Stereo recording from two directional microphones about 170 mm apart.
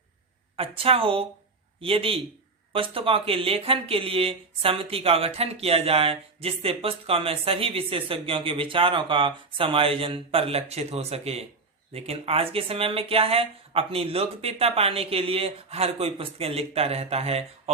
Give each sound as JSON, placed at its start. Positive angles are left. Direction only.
{"t": 0.5, "sound": "speech", "side_deg": -35}